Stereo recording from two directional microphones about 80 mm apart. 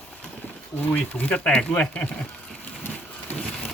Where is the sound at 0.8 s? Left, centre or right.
Left.